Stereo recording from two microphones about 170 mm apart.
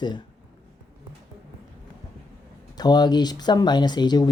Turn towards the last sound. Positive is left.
turn(degrees=25)  # may be behind; listen again after turning